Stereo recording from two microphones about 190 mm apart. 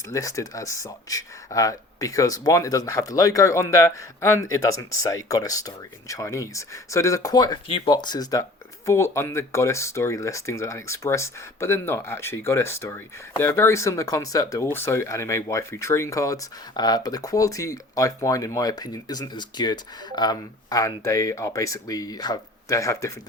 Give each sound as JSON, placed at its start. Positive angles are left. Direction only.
{"t": 0.1, "sound": "speech", "side_deg": 15}